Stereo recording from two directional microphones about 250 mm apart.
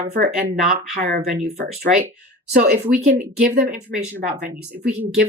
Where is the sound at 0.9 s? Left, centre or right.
Right.